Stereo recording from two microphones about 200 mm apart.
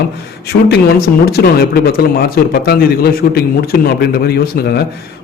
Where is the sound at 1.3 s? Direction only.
50° left (ahead or behind).